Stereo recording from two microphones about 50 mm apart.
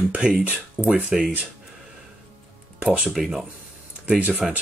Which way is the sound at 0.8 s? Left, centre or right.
Left.